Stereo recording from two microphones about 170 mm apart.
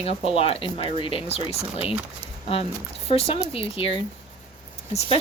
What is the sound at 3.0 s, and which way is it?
Speech, 35° left (ahead or behind).